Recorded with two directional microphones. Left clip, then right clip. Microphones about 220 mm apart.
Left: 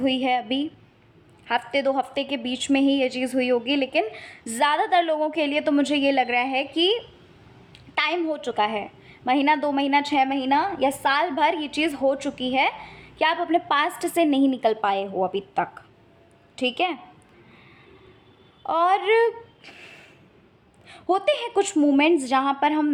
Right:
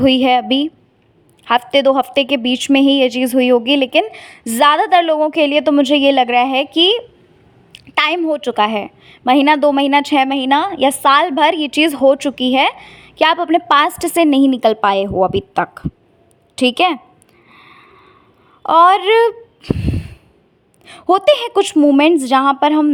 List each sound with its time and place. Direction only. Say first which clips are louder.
0.0 s a woman's voice: right 11 dB; 40° right (ahead or behind)
17.5 s a sound: right 12 dB; 40° right (ahead or behind)
18.6 s a woman's voice: right 11 dB; 40° right (ahead or behind)